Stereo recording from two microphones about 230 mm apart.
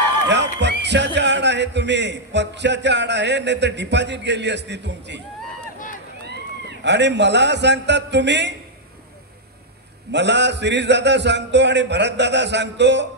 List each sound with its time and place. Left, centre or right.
0.3 s a man's voice: right
6.8 s a man's voice: right
10.1 s a man's voice: right